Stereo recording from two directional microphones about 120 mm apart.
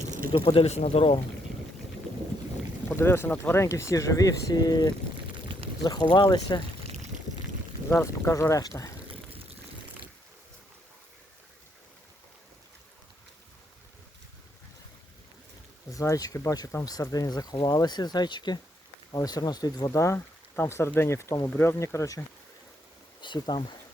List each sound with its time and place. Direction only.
0.3 s speech: 55° left (ahead or behind)
2.9 s speech: 20° left (ahead or behind); by 6.6 s 40° left (ahead or behind)
7.9 s speech: 20° left (ahead or behind)
15.9 s speech: 30° left (ahead or behind)
23.2 s speech: 40° left (ahead or behind)